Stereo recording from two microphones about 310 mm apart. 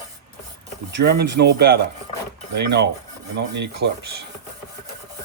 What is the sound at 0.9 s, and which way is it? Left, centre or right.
Speech, right.